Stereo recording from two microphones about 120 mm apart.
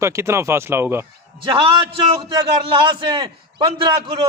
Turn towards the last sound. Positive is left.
turn(degrees=-40)  # may be behind; listen again after turning